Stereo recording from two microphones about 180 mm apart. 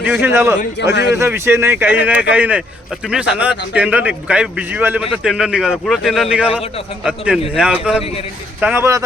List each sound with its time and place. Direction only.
0.1 s speech: 10° right (ahead or behind)
0.8 s a man's voice: 70° left (ahead or behind)
1.1 s a man's voice: 15° right (ahead or behind)